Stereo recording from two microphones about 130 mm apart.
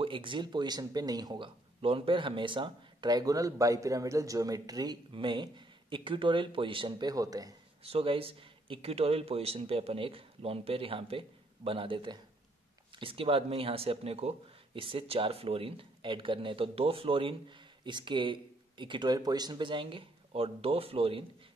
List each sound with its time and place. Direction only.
0.0 s speech: 40° right (ahead or behind)
1.8 s speech: 45° right (ahead or behind); by 7.5 s 30° right (ahead or behind)
7.8 s speech: 45° right (ahead or behind)